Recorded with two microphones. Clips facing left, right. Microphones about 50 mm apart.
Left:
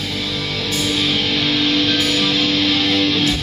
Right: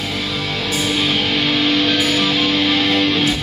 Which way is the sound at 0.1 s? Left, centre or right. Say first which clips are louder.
Right 1 dB; centre.